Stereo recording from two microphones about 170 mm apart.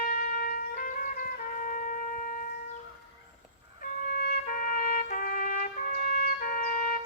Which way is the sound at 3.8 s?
60° left (ahead or behind).